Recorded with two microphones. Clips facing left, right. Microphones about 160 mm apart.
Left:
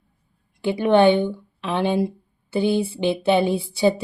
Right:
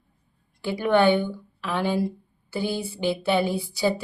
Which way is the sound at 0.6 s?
20° left (ahead or behind).